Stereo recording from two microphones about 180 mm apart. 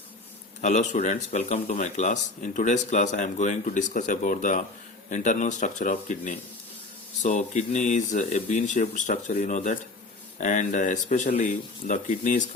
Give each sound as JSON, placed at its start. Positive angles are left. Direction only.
{"t": 0.6, "sound": "a man's voice", "side_deg": 40}